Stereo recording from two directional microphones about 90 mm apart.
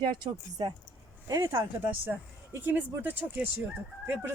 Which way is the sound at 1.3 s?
35° right (ahead or behind).